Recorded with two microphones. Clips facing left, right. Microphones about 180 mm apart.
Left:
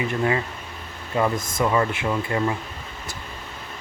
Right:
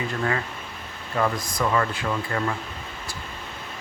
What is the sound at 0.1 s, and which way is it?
Speech, 20° left (ahead or behind).